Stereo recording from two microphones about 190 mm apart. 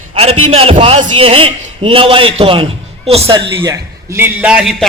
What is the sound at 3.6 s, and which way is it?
A man's voice, 15° right (ahead or behind).